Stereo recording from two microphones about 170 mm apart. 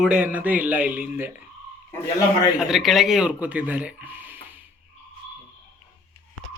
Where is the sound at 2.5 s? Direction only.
Centre (ahead or behind).